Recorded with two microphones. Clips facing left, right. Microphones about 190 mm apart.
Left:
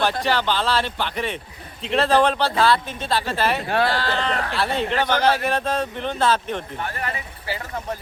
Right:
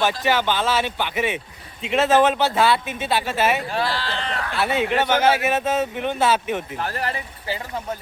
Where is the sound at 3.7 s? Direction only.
55° left (ahead or behind); by 4.5 s 40° left (ahead or behind).